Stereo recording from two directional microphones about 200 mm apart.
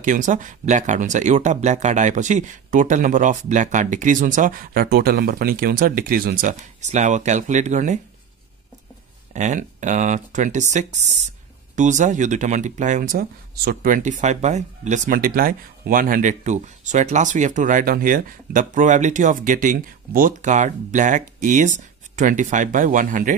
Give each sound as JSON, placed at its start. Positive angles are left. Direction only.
{"t": 0.0, "sound": "speech", "side_deg": -40}
{"t": 9.3, "sound": "speech", "side_deg": -35}